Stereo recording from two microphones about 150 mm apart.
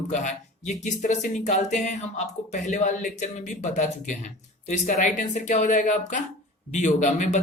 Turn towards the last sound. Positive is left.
turn(degrees=55)  # may be behind; listen again after turning